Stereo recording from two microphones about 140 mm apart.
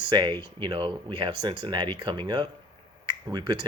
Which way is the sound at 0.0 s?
35° right (ahead or behind).